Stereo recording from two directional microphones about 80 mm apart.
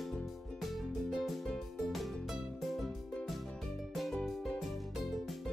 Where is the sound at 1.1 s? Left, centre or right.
Centre.